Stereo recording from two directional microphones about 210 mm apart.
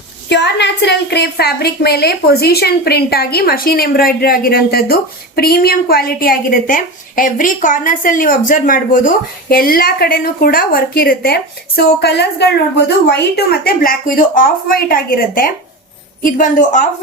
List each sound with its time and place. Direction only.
0.3 s a woman's voice: 55° left (ahead or behind); by 16.9 s 35° left (ahead or behind)